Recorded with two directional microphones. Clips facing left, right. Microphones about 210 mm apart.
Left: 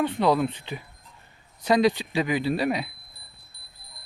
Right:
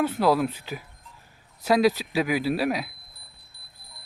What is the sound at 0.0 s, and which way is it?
Speech, 5° right (ahead or behind).